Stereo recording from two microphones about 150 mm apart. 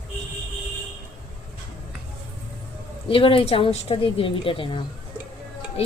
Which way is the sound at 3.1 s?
35° left (ahead or behind).